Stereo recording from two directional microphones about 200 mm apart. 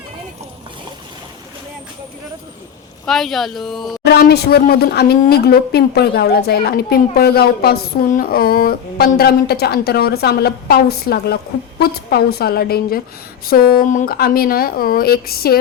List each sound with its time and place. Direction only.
3.1 s speech: centre (ahead or behind)
4.0 s a woman's voice: 55° left (ahead or behind)